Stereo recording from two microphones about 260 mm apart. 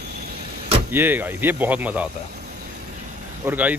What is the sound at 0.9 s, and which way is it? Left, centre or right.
Speech, centre.